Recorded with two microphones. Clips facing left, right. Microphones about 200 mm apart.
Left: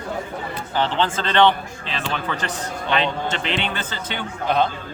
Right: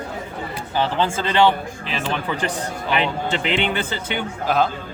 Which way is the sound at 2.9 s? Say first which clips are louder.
Right 1 dB; 15° right (ahead or behind).